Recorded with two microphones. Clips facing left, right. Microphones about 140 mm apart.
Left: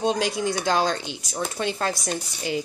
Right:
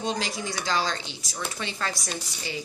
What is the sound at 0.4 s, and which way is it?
Speech, 55° left (ahead or behind).